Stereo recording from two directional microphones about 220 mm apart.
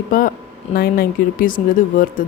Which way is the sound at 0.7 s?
40° left (ahead or behind).